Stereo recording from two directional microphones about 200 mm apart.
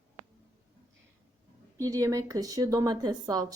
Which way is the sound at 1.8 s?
15° right (ahead or behind).